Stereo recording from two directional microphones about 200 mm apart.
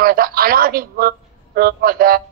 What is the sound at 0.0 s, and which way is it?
A man's voice, 50° right (ahead or behind).